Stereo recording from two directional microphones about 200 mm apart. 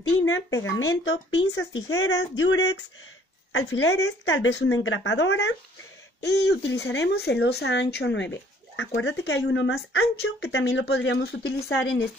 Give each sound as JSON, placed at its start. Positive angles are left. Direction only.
{"t": 0.7, "sound": "a woman's voice", "side_deg": 80}
{"t": 9.2, "sound": "a woman's voice", "side_deg": 55}